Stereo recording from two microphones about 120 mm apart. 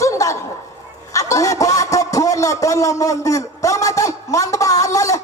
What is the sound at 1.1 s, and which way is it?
A man's voice, 25° left (ahead or behind).